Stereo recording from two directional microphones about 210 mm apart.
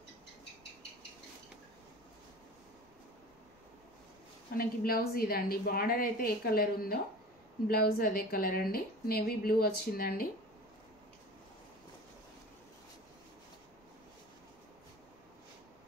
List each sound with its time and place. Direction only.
4.6 s a woman's voice: 45° left (ahead or behind)